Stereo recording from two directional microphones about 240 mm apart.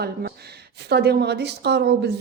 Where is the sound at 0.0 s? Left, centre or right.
Right.